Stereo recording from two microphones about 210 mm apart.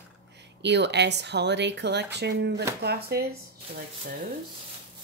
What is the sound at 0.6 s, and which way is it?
A woman's voice, 55° right (ahead or behind).